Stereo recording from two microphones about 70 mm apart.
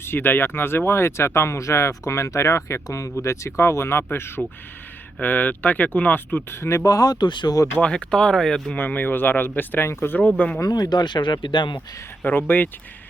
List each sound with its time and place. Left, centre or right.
0.0 s speech: left
5.2 s speech: left
6.8 s speech: left
7.8 s speech: centre
8.7 s speech: left
10.2 s speech: centre
10.6 s speech: left
12.2 s speech: left